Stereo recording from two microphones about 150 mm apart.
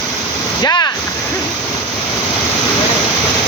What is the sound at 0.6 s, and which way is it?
Speech, 25° left (ahead or behind).